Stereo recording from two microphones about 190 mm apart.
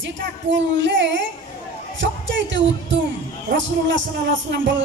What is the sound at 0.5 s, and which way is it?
Speech, 75° right (ahead or behind).